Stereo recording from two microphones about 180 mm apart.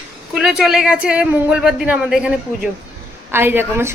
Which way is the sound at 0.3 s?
5° right (ahead or behind).